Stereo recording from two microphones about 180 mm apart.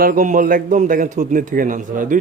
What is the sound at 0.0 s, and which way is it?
A man's voice, 50° right (ahead or behind).